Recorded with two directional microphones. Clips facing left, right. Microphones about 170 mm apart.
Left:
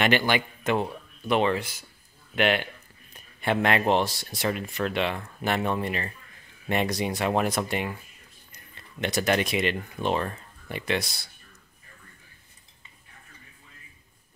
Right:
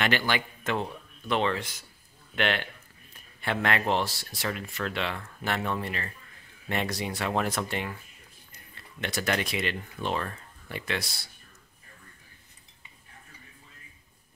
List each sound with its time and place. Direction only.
0.0 s speech: 20° left (ahead or behind)
9.0 s speech: 20° left (ahead or behind)